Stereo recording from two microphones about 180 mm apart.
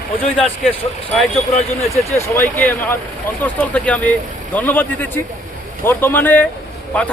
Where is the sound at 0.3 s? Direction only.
5° left (ahead or behind).